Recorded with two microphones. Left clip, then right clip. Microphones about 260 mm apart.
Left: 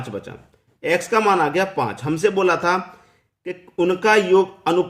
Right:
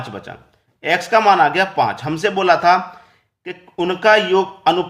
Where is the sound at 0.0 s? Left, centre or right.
Centre.